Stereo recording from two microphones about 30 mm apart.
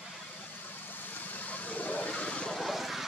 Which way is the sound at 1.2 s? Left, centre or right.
Left.